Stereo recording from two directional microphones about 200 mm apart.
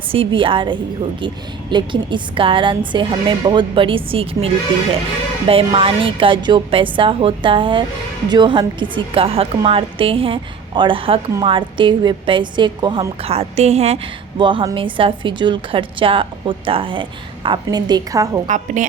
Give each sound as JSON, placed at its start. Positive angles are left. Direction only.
{"t": 0.1, "sound": "a woman's voice", "side_deg": -25}
{"t": 18.4, "sound": "a woman's voice", "side_deg": -40}